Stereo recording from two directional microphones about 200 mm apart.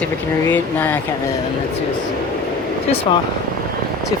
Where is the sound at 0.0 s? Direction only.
10° left (ahead or behind).